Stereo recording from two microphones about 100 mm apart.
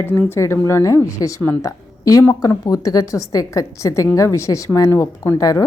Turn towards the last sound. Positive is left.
turn(degrees=35)  # may be behind; listen again after turning